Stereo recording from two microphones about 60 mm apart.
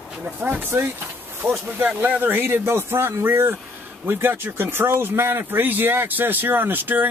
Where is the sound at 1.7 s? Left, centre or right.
Right.